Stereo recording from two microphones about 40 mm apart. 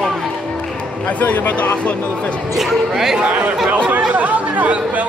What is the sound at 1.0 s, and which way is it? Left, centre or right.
Speech, left.